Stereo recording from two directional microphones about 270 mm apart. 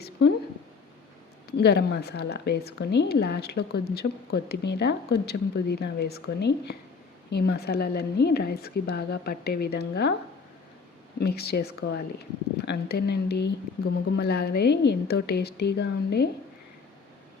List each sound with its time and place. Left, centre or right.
0.2 s a woman's voice: left
1.5 s a woman's voice: left
11.2 s a woman's voice: left